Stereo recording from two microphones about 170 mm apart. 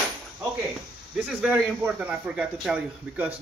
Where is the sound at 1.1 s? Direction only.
5° right (ahead or behind).